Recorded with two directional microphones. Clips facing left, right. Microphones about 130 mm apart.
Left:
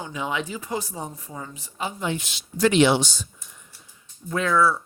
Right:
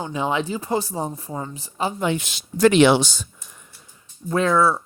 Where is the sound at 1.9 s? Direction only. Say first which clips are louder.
Right 4 dB; 70° right (ahead or behind).